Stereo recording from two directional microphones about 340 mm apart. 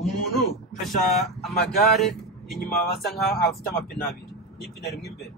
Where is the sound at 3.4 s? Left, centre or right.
Left.